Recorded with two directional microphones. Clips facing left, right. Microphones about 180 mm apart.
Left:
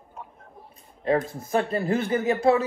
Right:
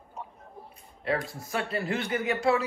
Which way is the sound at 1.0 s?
45° left (ahead or behind).